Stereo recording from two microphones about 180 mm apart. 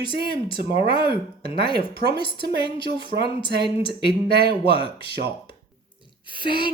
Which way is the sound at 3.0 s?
65° right (ahead or behind).